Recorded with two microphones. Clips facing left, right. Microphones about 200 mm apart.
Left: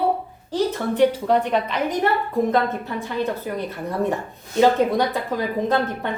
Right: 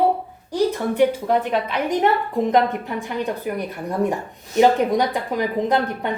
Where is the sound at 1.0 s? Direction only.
10° right (ahead or behind).